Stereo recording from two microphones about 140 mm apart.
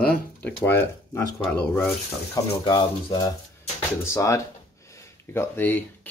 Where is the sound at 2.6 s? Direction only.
30° left (ahead or behind).